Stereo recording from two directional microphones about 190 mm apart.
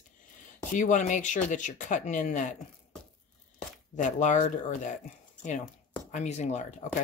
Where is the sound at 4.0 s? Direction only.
40° left (ahead or behind).